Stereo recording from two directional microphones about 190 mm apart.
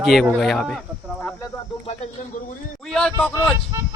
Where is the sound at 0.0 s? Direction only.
Centre (ahead or behind).